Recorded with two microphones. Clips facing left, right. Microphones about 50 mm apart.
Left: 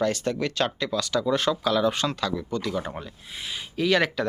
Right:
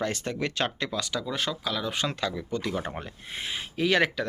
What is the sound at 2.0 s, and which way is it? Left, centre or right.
Speech, right.